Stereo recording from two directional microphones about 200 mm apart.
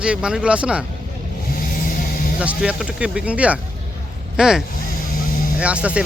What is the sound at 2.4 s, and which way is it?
Speech, 5° right (ahead or behind).